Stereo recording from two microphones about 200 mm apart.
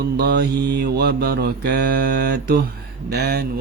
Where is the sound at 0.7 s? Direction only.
55° right (ahead or behind).